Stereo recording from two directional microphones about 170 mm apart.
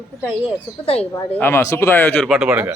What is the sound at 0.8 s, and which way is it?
Speech, 35° left (ahead or behind).